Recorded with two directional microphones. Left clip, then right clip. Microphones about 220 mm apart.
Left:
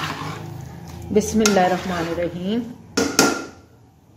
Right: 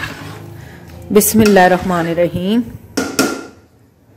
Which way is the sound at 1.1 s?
40° right (ahead or behind).